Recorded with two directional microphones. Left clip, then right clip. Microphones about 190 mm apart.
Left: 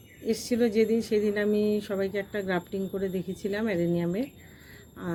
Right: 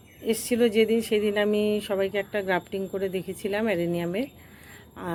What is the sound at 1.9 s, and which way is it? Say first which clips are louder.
Speech: right 4 dB; 20° left (ahead or behind).